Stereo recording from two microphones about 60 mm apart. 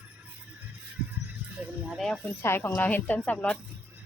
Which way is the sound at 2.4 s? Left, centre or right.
Left.